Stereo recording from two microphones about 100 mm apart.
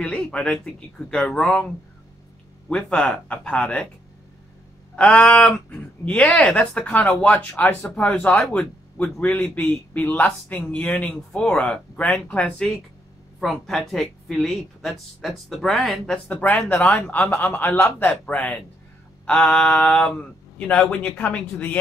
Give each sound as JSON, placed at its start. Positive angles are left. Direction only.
{"t": 0.0, "sound": "speech", "side_deg": 10}
{"t": 2.7, "sound": "speech", "side_deg": 10}
{"t": 4.9, "sound": "speech", "side_deg": 10}
{"t": 16.3, "sound": "speech", "side_deg": 15}